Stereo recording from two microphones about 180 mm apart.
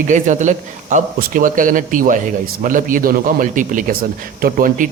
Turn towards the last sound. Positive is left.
turn(degrees=-50)  # may be behind; listen again after turning